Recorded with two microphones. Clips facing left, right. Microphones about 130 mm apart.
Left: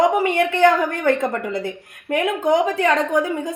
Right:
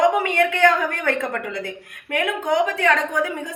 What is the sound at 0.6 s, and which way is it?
A woman's voice, 35° left (ahead or behind).